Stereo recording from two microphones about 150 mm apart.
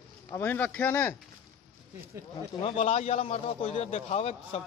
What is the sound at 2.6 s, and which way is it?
A man's voice, 40° left (ahead or behind).